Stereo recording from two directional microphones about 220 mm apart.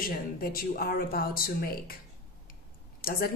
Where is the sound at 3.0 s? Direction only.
40° left (ahead or behind).